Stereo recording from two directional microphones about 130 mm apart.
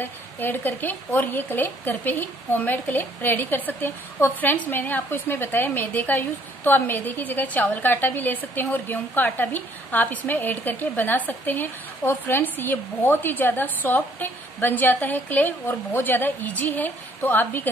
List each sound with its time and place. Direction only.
0.0 s speech: 15° left (ahead or behind)